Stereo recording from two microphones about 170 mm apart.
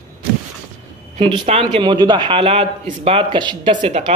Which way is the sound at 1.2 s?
30° right (ahead or behind).